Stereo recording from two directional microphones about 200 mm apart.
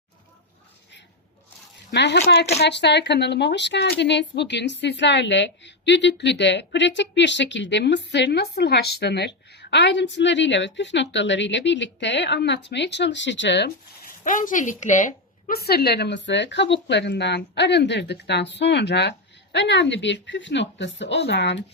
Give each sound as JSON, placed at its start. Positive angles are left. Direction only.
{"t": 1.9, "sound": "speech", "side_deg": 60}
{"t": 14.3, "sound": "speech", "side_deg": 40}